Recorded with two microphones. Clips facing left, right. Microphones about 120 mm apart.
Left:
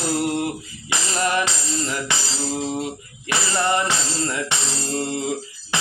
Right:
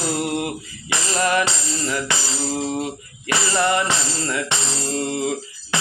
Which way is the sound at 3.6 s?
30° left (ahead or behind).